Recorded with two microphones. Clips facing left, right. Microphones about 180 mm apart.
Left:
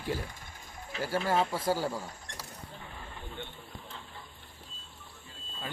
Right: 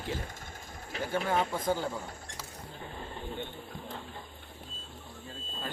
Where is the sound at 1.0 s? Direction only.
5° left (ahead or behind).